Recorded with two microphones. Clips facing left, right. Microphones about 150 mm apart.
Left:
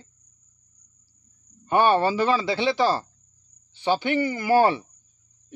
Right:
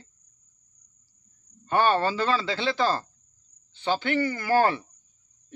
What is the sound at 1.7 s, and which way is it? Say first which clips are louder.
Speech: left 3 dB; 15° left (ahead or behind).